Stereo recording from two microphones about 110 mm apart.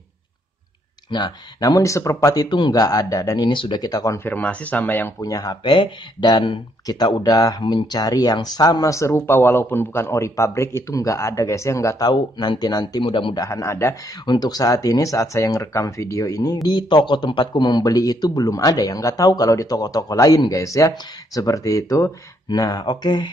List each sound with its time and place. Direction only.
1.1 s speech: 40° left (ahead or behind)
2.5 s speech: 40° left (ahead or behind)
4.2 s speech: 15° left (ahead or behind)
5.2 s speech: 35° left (ahead or behind)
13.0 s speech: 50° left (ahead or behind)
13.4 s speech: 30° left (ahead or behind)
14.2 s speech: 40° left (ahead or behind)
16.6 s speech: 40° left (ahead or behind)
22.5 s speech: 40° left (ahead or behind)